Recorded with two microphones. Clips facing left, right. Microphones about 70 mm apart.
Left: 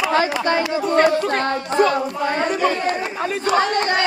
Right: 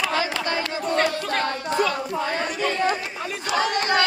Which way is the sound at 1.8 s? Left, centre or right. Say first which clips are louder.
Left 5 dB; left.